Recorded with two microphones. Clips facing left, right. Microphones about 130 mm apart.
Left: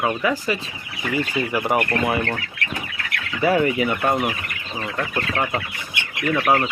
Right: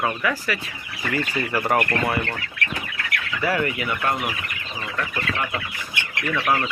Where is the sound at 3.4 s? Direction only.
20° left (ahead or behind).